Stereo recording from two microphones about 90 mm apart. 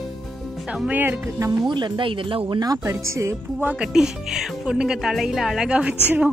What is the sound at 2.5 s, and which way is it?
Speech, 45° right (ahead or behind).